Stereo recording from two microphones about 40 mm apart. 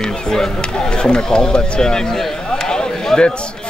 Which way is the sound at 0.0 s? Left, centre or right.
Centre.